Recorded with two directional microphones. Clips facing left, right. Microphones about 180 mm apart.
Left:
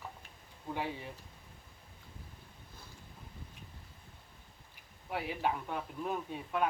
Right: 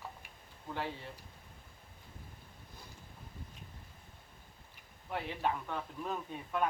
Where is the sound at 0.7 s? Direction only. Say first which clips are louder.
Left 1 dB; 15° left (ahead or behind).